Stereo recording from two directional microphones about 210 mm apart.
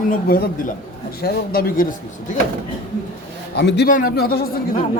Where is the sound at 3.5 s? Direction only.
50° left (ahead or behind).